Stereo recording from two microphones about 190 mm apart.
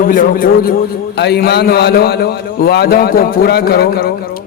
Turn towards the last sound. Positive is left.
turn(degrees=50)  # may be behind; listen again after turning